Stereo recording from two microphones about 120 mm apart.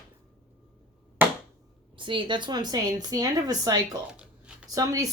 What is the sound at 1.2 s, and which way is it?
Chop, 15° right (ahead or behind).